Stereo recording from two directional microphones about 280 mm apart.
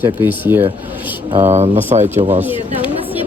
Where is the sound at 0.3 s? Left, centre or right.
Centre.